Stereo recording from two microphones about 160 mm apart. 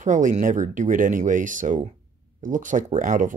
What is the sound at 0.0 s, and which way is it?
Speech, 50° right (ahead or behind).